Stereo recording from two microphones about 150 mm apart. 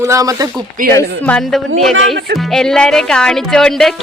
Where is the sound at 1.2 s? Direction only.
5° left (ahead or behind).